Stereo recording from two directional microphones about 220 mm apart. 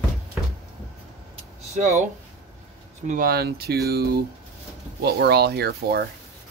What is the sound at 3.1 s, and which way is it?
Speech, 40° right (ahead or behind).